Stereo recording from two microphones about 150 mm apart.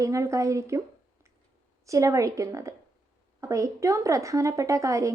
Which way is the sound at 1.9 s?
20° right (ahead or behind).